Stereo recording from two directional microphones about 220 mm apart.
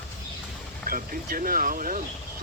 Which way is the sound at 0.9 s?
40° right (ahead or behind).